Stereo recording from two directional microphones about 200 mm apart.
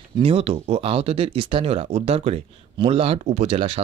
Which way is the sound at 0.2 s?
30° right (ahead or behind).